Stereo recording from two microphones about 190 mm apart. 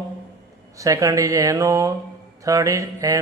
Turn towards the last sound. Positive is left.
turn(degrees=-15)  # may be behind; listen again after turning